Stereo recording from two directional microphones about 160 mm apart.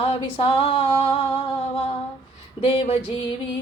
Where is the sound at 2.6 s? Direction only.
35° left (ahead or behind).